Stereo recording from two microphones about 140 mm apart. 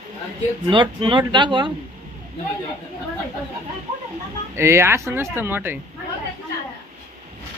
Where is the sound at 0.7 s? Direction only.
35° right (ahead or behind).